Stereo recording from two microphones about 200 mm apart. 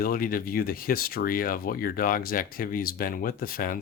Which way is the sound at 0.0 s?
45° left (ahead or behind).